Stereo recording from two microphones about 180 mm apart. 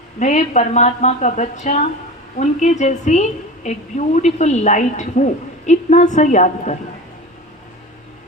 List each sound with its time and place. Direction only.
0.2 s a woman's voice: 40° left (ahead or behind)